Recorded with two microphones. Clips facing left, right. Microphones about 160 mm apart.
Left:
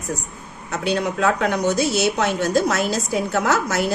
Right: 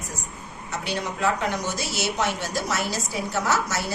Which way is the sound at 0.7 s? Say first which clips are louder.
Left 7 dB; 60° left (ahead or behind).